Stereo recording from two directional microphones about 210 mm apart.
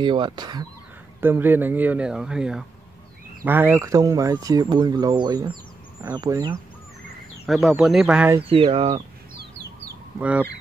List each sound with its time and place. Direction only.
0.0 s speech: 20° right (ahead or behind)
1.2 s speech: 10° right (ahead or behind)
7.4 s speech: centre (ahead or behind)
8.4 s speech: 25° right (ahead or behind)
10.1 s speech: 5° right (ahead or behind)